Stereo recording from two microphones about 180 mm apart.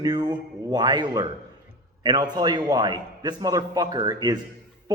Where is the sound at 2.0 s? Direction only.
25° right (ahead or behind).